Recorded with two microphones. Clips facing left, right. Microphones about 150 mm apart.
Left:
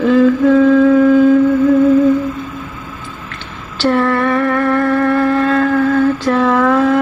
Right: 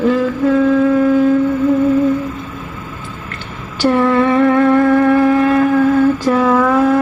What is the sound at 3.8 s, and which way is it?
Music, 15° right (ahead or behind).